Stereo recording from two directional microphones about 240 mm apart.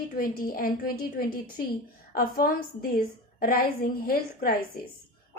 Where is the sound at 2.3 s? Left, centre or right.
Left.